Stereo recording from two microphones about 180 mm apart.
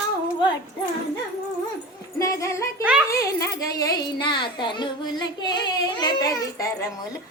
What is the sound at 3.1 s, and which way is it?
A child's voice, 15° left (ahead or behind).